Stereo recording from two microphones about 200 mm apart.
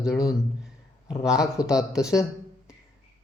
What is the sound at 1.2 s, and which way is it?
Speech, 5° right (ahead or behind).